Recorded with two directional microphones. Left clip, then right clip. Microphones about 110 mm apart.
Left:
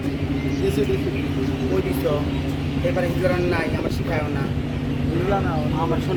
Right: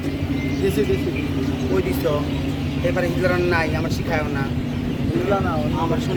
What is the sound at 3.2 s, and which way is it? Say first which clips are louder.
Speech: right 3 dB; 20° right (ahead or behind).